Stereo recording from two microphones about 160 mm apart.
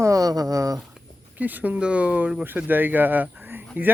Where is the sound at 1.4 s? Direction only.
10° right (ahead or behind).